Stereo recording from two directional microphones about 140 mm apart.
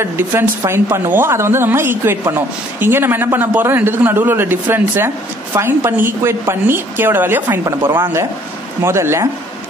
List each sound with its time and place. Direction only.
0.0 s a woman's voice: 15° right (ahead or behind)